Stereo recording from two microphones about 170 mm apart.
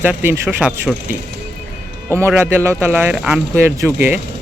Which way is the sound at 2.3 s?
15° right (ahead or behind).